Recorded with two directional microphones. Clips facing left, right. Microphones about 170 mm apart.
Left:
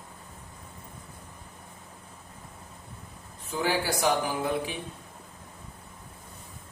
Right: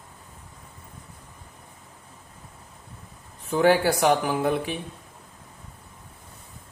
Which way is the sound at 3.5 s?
60° right (ahead or behind).